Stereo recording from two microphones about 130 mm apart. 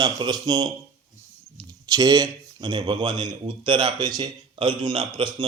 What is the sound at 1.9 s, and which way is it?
Speech, 30° right (ahead or behind).